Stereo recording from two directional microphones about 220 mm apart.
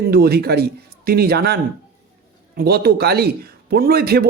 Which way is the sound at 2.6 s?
45° right (ahead or behind).